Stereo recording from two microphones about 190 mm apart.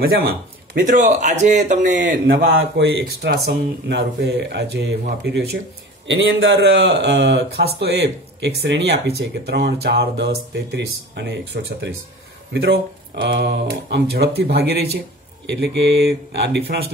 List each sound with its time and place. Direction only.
0.7 s speech: 40° right (ahead or behind)
2.4 s a man's voice: 75° right (ahead or behind); by 4.9 s 60° right (ahead or behind)
6.0 s a man's voice: 70° right (ahead or behind)